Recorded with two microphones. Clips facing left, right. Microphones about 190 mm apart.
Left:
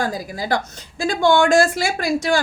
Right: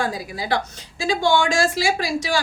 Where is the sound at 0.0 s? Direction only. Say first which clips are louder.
Left 2 dB; 45° left (ahead or behind).